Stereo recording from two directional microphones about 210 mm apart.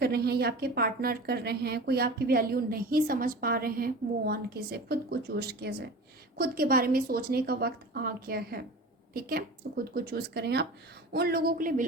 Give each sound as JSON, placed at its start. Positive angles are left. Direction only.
{"t": 0.0, "sound": "a woman's voice", "side_deg": -50}